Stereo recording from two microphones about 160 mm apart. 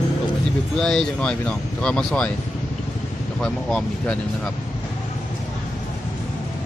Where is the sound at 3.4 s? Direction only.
5° left (ahead or behind).